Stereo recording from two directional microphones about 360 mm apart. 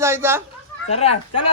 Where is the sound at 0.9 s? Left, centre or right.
Centre.